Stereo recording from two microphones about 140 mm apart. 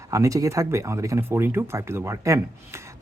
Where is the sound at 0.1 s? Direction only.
25° right (ahead or behind).